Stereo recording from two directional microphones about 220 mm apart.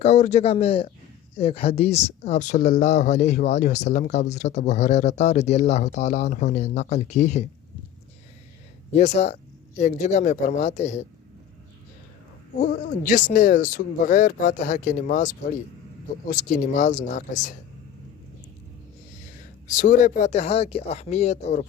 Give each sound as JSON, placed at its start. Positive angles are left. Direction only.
{"t": 0.0, "sound": "speech", "side_deg": 30}
{"t": 8.9, "sound": "speech", "side_deg": 30}
{"t": 13.3, "sound": "speech", "side_deg": 35}
{"t": 19.6, "sound": "speech", "side_deg": 35}